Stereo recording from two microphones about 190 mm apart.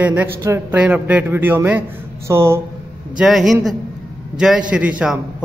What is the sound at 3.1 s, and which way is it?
A man's voice, centre (ahead or behind).